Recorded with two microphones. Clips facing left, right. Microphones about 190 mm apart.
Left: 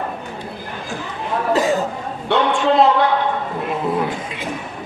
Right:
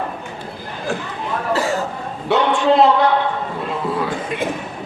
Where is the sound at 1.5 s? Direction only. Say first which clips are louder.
Left 3 dB; 20° left (ahead or behind).